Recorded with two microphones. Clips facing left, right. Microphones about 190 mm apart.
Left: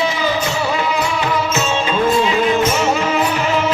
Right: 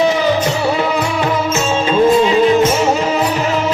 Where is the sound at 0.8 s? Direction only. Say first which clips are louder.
Right 3 dB; 45° right (ahead or behind).